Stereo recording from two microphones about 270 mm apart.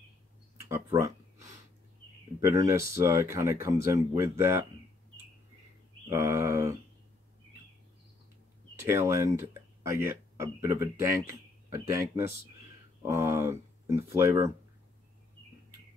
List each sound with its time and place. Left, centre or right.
0.6 s a sound: centre
2.4 s speech: centre
6.0 s speech: centre
8.7 s speech: centre